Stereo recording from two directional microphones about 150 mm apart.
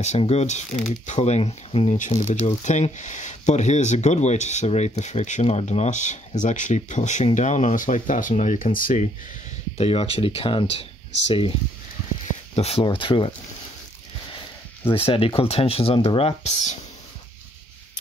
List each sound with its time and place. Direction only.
0.2 s speech: 45° left (ahead or behind)
2.0 s speech: 55° left (ahead or behind)
9.8 s speech: 40° left (ahead or behind)
12.5 s speech: 40° left (ahead or behind)
14.9 s speech: 40° left (ahead or behind)